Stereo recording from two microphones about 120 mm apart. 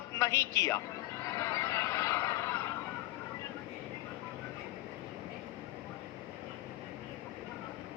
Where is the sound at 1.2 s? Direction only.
25° left (ahead or behind).